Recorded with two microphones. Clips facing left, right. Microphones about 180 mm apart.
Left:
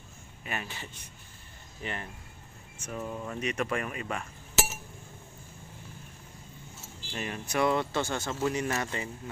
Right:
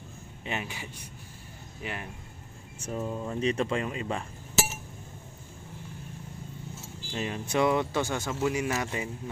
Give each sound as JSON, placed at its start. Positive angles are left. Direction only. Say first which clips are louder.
{"t": 0.5, "sound": "speech", "louder": "right 3 dB", "side_deg": -15}
{"t": 2.8, "sound": "speech", "louder": "right 3 dB", "side_deg": -25}
{"t": 7.1, "sound": "speech", "louder": "right 3 dB", "side_deg": -20}